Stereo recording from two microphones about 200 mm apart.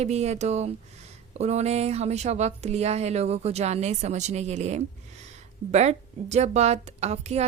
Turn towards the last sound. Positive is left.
turn(degrees=-35)  # may be behind; listen again after turning